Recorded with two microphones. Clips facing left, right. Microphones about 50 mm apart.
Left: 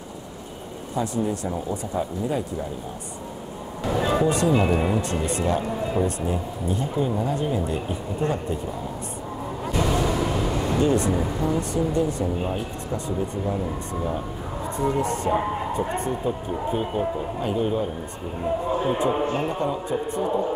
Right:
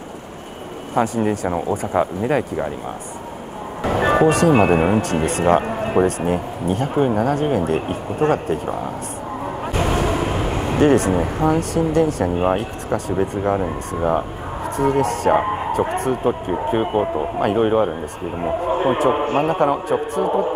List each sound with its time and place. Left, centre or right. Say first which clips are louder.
0.9 s speech: right 7 dB; right
3.8 s speech: right 6 dB; right
5.0 s speech: right 7 dB; right
9.7 s vehicle: right 3 dB; right
10.8 s speech: right 8 dB; right
12.4 s a man's voice: right 9 dB; right
12.9 s speech: right 7 dB; right
13.6 s a man's voice: right 6 dB; right
14.8 s speech: right 6 dB; right
16.0 s a man's voice: right 6 dB; right
20.2 s a man's voice: right 5 dB; right